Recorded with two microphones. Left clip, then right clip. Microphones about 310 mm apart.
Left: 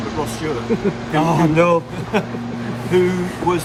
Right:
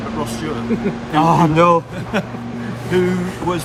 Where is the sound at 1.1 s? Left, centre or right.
Centre.